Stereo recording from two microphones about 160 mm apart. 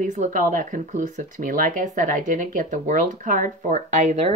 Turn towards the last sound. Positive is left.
turn(degrees=-55)  # may be behind; listen again after turning